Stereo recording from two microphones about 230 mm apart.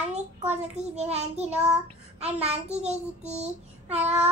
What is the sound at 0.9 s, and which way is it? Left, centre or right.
A child's voice, right.